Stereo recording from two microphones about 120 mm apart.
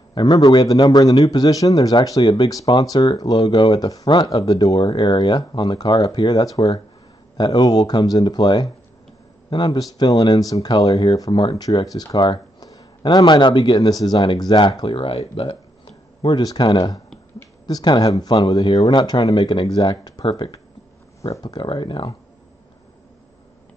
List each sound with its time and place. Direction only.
0.1 s a man's voice: 35° left (ahead or behind)
21.2 s a man's voice: 30° left (ahead or behind)